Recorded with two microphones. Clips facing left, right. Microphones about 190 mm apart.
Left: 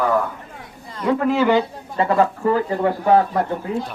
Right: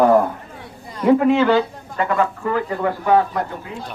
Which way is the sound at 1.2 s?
5° left (ahead or behind).